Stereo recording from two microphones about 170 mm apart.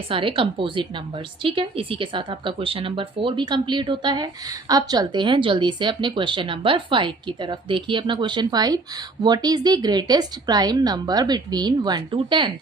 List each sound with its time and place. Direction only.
0.1 s speech: 30° right (ahead or behind)